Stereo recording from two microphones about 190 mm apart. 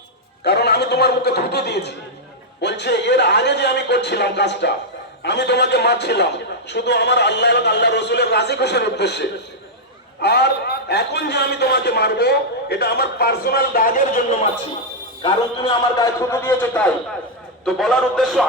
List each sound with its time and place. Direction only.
0.4 s a man's voice: 60° left (ahead or behind); by 14.3 s 45° left (ahead or behind)
15.2 s a man's voice: 20° left (ahead or behind); by 18.4 s centre (ahead or behind)